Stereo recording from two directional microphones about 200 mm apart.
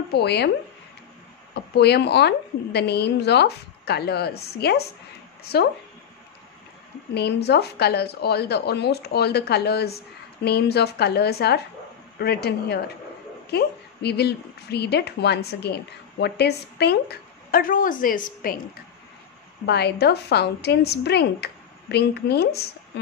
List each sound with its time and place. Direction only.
0.1 s a woman's voice: 55° left (ahead or behind)
1.5 s a woman's voice: 55° left (ahead or behind)
7.2 s a woman's voice: 55° left (ahead or behind)
19.6 s a woman's voice: 55° left (ahead or behind)